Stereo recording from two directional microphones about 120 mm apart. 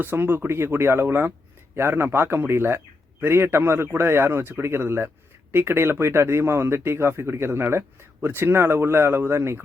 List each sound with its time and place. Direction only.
0.0 s a man's voice: 20° right (ahead or behind)